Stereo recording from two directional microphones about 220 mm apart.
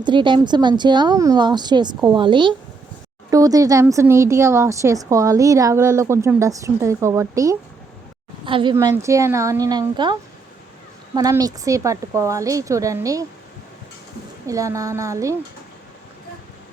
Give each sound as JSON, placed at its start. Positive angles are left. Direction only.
{"t": 0.0, "sound": "a woman's voice", "side_deg": -20}
{"t": 14.4, "sound": "speech", "side_deg": -15}